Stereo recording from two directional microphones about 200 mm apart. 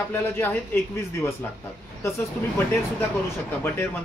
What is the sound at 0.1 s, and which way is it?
Speech, 10° left (ahead or behind).